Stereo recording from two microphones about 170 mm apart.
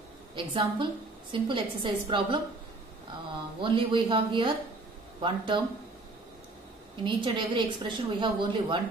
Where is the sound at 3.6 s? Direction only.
30° right (ahead or behind).